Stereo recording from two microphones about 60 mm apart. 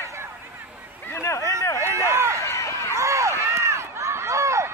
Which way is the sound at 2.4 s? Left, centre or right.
Left.